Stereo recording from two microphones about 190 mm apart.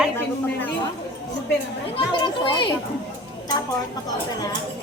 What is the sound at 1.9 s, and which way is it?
Speech, 25° left (ahead or behind).